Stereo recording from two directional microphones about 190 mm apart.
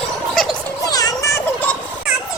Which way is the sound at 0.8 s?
20° left (ahead or behind).